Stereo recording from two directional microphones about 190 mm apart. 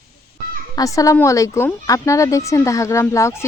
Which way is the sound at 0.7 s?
15° left (ahead or behind).